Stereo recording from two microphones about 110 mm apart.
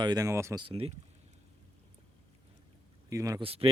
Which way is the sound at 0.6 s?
60° right (ahead or behind).